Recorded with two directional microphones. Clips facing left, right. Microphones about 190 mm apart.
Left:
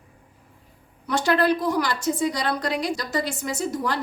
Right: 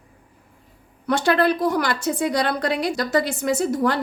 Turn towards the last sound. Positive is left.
turn(degrees=-55)  # may be behind; listen again after turning